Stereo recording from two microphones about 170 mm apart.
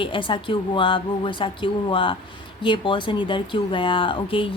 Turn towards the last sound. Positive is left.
turn(degrees=30)  # may be behind; listen again after turning